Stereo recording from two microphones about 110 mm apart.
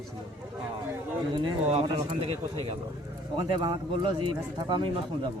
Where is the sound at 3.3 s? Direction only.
45° right (ahead or behind).